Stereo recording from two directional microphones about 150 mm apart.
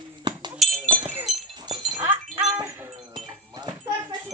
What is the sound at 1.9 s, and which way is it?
Wind chime, 15° right (ahead or behind).